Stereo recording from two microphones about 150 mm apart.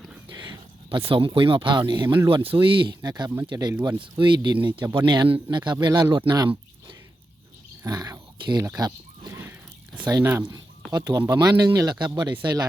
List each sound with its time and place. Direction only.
0.3 s speech: 30° right (ahead or behind)
2.0 s speech: 15° right (ahead or behind)
2.3 s speech: 35° right (ahead or behind)
4.7 s speech: 15° right (ahead or behind)
4.9 s speech: 30° right (ahead or behind)
7.9 s speech: 25° right (ahead or behind)
8.8 s neigh: 25° right (ahead or behind)
9.4 s a sound: 10° right (ahead or behind)
10.1 s speech: 20° right (ahead or behind)